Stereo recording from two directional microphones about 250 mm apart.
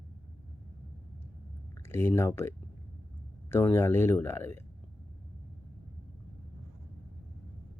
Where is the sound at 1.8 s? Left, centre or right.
Centre.